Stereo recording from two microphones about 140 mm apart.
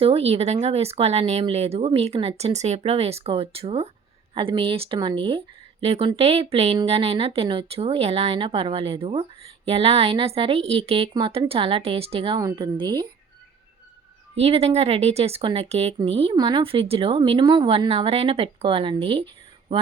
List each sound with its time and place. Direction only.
0.0 s speech: 45° right (ahead or behind)
12.4 s speech: 30° right (ahead or behind)
14.3 s speech: 45° right (ahead or behind)
16.3 s speech: 30° right (ahead or behind)